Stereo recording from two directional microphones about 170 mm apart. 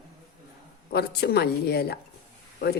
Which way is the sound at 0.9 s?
70° left (ahead or behind).